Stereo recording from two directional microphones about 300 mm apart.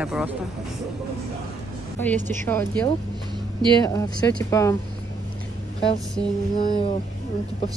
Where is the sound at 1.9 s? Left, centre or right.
Centre.